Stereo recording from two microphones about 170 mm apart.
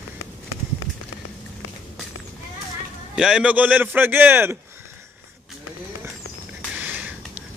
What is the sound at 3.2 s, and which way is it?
A man's voice, 5° right (ahead or behind).